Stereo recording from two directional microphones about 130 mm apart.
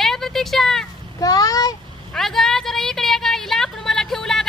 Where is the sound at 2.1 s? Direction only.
Centre (ahead or behind).